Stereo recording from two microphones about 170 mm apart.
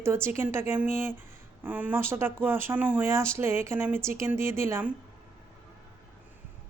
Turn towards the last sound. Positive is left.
turn(degrees=-10)  # may be behind; listen again after turning